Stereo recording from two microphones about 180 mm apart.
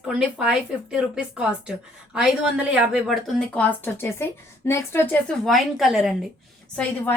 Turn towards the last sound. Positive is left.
turn(degrees=5)  # may be behind; listen again after turning